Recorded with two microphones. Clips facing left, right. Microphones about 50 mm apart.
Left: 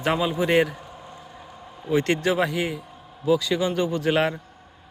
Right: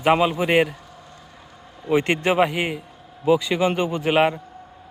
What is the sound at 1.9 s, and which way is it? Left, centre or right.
Speech, right.